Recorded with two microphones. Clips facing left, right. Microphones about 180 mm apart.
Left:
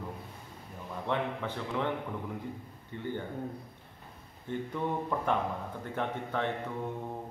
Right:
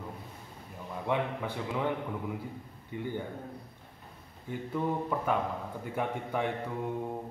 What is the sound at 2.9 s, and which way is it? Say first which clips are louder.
Speech: right 3 dB; 10° right (ahead or behind).